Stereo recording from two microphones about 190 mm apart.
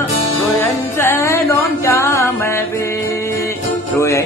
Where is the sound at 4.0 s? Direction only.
15° left (ahead or behind).